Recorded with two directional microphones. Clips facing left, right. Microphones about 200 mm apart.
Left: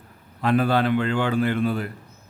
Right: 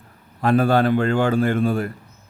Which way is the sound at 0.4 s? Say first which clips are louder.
Right 3 dB; 45° right (ahead or behind).